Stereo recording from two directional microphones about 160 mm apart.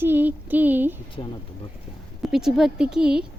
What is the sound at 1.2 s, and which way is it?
Speech, 35° left (ahead or behind).